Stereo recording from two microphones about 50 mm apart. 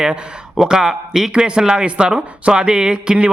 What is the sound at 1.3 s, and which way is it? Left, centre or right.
Speech, centre.